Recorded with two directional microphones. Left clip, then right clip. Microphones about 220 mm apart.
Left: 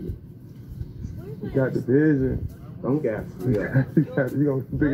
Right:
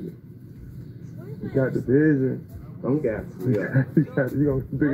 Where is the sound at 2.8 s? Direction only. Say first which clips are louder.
Even; 40° right (ahead or behind).